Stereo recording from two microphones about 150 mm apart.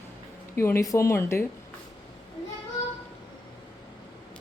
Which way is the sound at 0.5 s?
15° left (ahead or behind).